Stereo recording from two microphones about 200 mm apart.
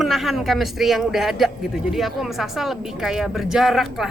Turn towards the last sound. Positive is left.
turn(degrees=0)  # may be behind; listen again after turning